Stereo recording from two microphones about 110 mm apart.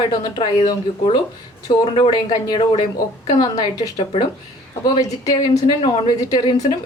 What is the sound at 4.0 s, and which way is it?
Speech, 55° left (ahead or behind).